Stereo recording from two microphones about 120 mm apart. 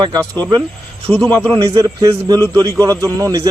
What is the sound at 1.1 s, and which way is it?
Speech, 10° left (ahead or behind).